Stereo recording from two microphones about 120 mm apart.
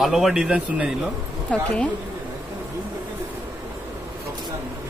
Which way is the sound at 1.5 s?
10° left (ahead or behind).